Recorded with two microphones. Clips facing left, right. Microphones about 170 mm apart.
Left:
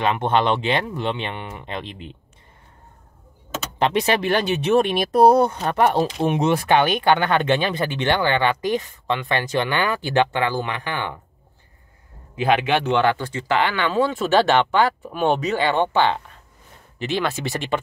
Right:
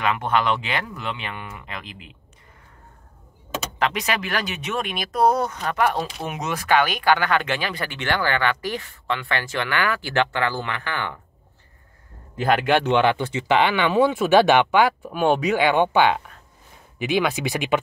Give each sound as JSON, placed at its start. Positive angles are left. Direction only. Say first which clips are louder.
{"t": 0.0, "sound": "speech", "louder": "left 3 dB", "side_deg": 25}
{"t": 3.8, "sound": "speech", "louder": "left 6 dB", "side_deg": 30}
{"t": 12.8, "sound": "speech", "louder": "even", "side_deg": -20}